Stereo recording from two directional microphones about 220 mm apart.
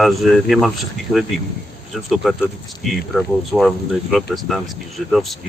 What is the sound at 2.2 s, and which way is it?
Speech, centre (ahead or behind).